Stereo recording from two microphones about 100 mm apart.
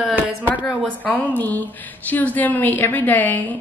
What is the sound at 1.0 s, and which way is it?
A woman's voice, 15° left (ahead or behind).